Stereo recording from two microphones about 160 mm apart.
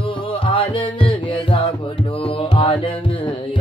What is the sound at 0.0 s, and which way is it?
Music, 35° left (ahead or behind).